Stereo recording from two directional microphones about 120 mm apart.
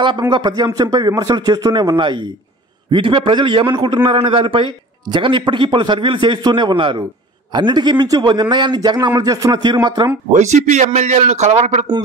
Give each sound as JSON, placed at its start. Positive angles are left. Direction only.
{"t": 0.2, "sound": "a man's voice", "side_deg": -40}
{"t": 10.3, "sound": "a man's voice", "side_deg": -75}